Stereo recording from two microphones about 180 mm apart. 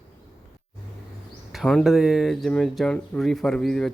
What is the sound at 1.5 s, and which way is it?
Speech, centre (ahead or behind).